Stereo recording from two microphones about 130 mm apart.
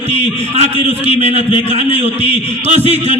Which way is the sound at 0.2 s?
55° right (ahead or behind).